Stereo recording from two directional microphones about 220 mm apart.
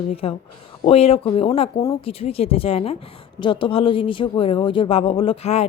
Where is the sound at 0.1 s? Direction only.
25° left (ahead or behind).